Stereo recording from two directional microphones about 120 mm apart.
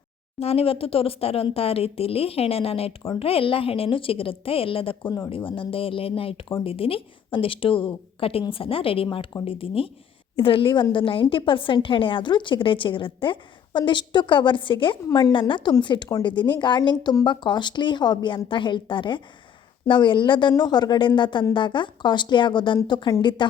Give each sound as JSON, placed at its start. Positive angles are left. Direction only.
{"t": 0.3, "sound": "a woman's voice", "side_deg": 55}